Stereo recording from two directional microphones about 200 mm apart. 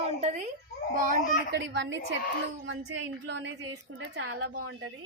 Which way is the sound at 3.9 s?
85° right.